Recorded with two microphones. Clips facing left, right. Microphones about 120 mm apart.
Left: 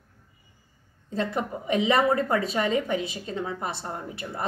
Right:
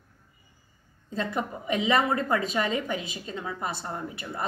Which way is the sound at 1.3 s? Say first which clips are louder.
Left 2 dB; 30° left (ahead or behind).